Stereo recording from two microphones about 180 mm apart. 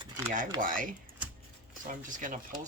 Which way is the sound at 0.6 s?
50° right (ahead or behind).